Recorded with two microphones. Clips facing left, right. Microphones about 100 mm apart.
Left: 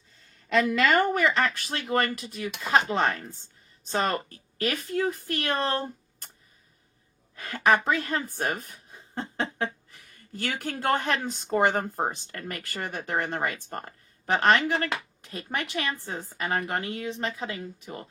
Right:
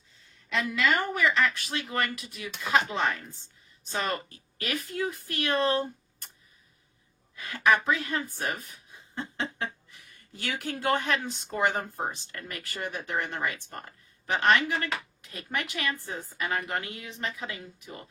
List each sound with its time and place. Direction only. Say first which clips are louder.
0.4 s speech: left 5 dB; 55° left (ahead or behind); by 6.2 s 40° left (ahead or behind)
7.3 s a sound: left 2 dB; 35° left (ahead or behind)
10.3 s speech: left 2 dB; 40° left (ahead or behind)